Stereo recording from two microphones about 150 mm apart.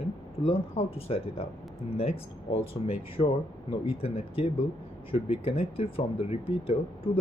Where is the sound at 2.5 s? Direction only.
40° left (ahead or behind).